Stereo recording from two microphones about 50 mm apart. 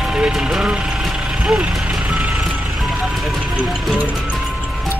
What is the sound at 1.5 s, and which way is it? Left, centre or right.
Speech, right.